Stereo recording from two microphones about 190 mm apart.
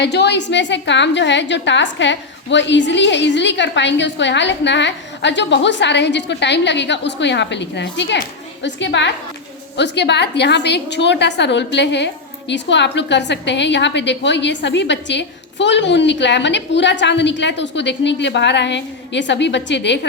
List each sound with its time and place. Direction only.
0.0 s a woman's voice: 60° left (ahead or behind)